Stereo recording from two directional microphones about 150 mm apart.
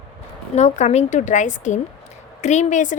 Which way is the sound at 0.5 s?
50° left (ahead or behind).